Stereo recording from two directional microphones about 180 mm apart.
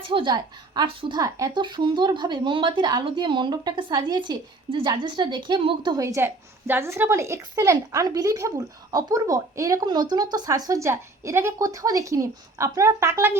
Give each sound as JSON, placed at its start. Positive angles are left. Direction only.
{"t": 0.1, "sound": "a woman's voice", "side_deg": -25}
{"t": 6.0, "sound": "a woman's voice", "side_deg": -15}